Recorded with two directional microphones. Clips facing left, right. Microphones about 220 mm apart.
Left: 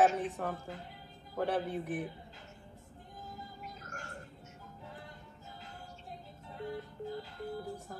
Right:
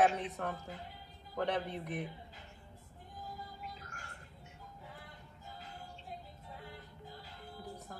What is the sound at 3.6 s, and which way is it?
Music, 40° left (ahead or behind).